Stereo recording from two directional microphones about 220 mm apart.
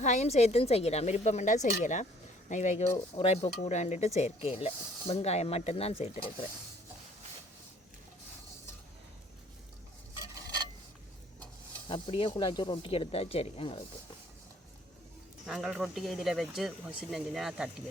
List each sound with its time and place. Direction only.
0.0 s a woman's voice: 30° left (ahead or behind)
11.9 s speech: 25° left (ahead or behind)
15.4 s speech: centre (ahead or behind)